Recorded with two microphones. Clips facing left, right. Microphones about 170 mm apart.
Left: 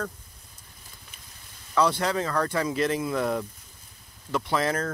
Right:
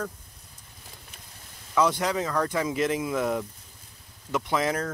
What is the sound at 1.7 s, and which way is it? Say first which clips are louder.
Speech: even; 15° right (ahead or behind).